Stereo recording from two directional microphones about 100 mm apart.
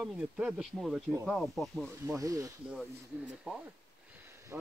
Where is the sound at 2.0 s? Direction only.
30° right (ahead or behind).